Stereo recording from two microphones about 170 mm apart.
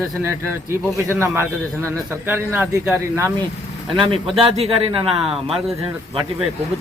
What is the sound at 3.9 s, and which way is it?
Speech, 30° right (ahead or behind).